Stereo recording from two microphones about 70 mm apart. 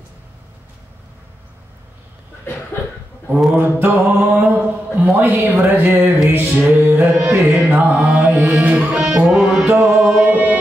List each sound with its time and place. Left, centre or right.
3.5 s speech: right
6.2 s music: right
7.1 s carnatic music: centre
7.3 s music: centre
7.9 s mantra: centre
8.6 s music: centre
9.7 s music: right
10.0 s music: centre
10.3 s music: right